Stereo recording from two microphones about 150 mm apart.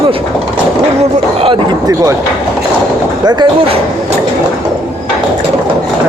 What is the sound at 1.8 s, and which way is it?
Speech, 25° right (ahead or behind).